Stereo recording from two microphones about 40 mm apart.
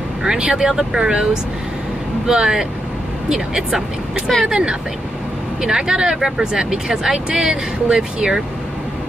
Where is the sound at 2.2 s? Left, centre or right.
Centre.